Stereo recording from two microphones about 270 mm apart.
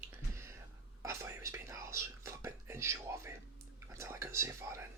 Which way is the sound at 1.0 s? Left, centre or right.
Centre.